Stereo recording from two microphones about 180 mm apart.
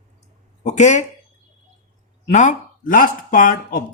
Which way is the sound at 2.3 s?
45° left (ahead or behind).